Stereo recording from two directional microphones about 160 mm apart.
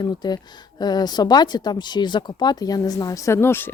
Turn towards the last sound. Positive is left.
turn(degrees=15)  # may be behind; listen again after turning